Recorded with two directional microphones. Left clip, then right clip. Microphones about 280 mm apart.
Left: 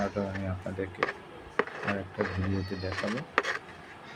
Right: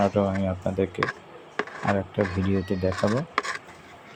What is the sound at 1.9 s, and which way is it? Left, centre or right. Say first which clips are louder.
Speech: right 7 dB; right.